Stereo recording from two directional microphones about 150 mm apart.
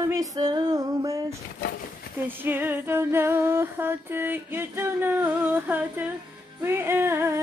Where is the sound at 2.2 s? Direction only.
15° right (ahead or behind).